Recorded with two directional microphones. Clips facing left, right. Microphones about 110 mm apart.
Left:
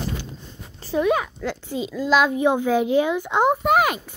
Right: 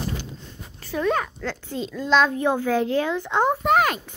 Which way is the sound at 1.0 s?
10° left (ahead or behind).